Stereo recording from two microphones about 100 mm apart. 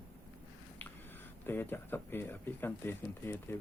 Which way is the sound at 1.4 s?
20° left (ahead or behind).